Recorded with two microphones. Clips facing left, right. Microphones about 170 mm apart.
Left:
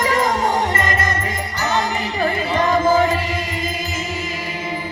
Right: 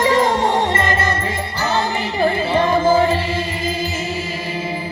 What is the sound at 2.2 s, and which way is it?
Music, 30° right (ahead or behind).